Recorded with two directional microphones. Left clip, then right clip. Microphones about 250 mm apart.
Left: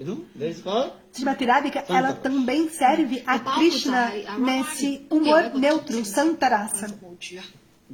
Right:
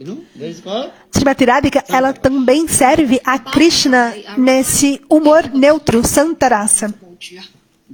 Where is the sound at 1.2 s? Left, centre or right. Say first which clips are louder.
Right 9 dB; right.